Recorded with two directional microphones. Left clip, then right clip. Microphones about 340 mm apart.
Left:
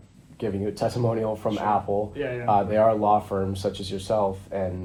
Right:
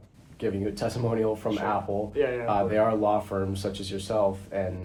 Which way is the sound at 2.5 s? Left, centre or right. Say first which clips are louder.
Left 7 dB; centre.